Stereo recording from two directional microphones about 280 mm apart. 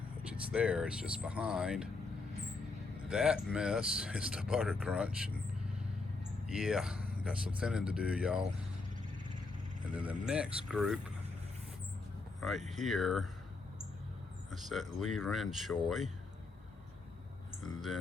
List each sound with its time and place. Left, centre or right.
0.5 s speech: centre
3.1 s speech: centre
6.5 s speech: centre
9.9 s speech: centre
12.5 s speech: right
12.8 s speech: centre
14.5 s speech: centre
17.6 s speech: centre